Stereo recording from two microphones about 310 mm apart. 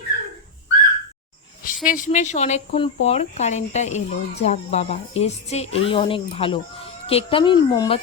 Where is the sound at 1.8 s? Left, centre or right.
Left.